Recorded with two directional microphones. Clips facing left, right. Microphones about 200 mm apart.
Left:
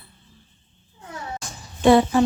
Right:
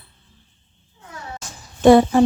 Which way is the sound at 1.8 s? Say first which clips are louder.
Right 4 dB; 45° right (ahead or behind).